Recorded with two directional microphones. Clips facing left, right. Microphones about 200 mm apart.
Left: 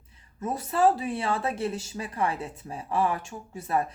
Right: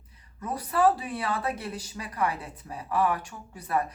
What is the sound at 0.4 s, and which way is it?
Speech, 25° left (ahead or behind).